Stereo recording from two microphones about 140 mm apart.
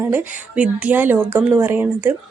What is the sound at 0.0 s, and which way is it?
Speech, 15° right (ahead or behind).